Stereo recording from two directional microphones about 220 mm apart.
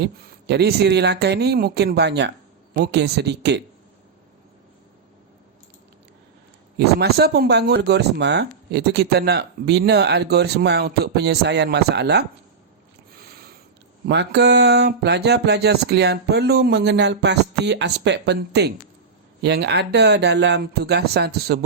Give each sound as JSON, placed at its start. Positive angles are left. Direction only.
{"t": 0.0, "sound": "speech", "side_deg": -50}
{"t": 6.7, "sound": "speech", "side_deg": -45}
{"t": 14.1, "sound": "speech", "side_deg": -50}